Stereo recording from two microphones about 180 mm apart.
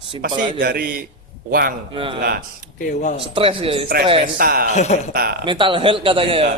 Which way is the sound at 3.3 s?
30° right (ahead or behind).